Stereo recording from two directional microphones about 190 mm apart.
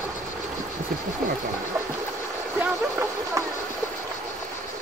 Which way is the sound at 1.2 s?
50° right (ahead or behind).